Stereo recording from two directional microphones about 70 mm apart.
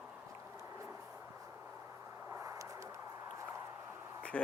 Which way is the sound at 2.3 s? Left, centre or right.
Right.